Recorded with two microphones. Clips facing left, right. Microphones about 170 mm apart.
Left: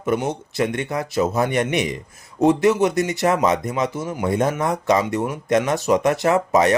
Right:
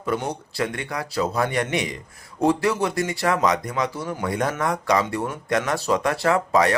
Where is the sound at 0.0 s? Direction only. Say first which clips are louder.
Left 4 dB; 20° left (ahead or behind).